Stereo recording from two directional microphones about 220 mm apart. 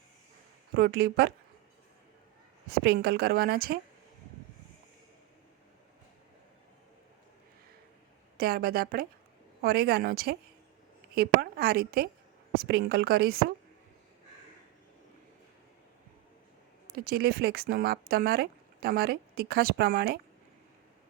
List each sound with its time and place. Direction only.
0.7 s speech: 45° right (ahead or behind)
2.6 s speech: 45° right (ahead or behind)
8.4 s speech: 45° right (ahead or behind)
16.9 s speech: 45° right (ahead or behind)